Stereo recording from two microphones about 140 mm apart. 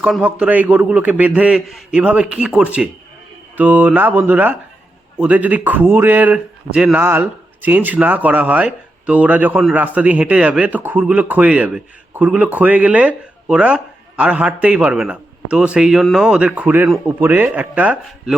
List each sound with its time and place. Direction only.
0.0 s speech: 5° right (ahead or behind)